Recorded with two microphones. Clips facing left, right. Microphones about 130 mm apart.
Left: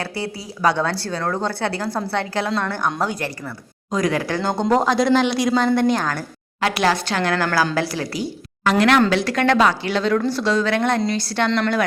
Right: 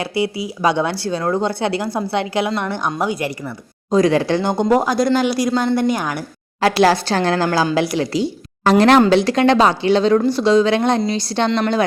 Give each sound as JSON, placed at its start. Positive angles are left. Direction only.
{"t": 0.0, "sound": "speech", "side_deg": -15}
{"t": 3.9, "sound": "speech", "side_deg": -25}
{"t": 4.7, "sound": "a woman's voice", "side_deg": -5}
{"t": 6.6, "sound": "speech", "side_deg": -35}